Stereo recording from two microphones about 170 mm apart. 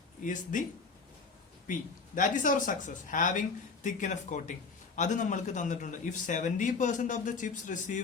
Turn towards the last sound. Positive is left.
turn(degrees=50)  # may be behind; listen again after turning